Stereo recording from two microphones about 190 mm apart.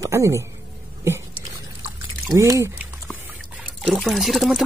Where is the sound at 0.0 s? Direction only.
15° right (ahead or behind).